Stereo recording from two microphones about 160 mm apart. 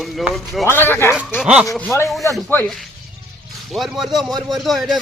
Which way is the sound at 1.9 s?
15° left (ahead or behind).